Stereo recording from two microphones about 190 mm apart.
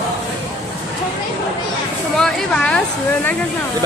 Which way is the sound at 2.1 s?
5° left (ahead or behind).